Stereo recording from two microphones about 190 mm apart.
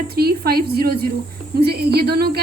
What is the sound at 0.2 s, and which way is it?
Speech, 55° right (ahead or behind).